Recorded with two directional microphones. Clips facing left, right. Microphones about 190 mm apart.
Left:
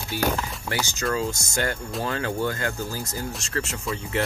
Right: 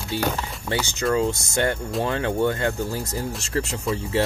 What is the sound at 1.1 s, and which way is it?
Speech, 25° right (ahead or behind).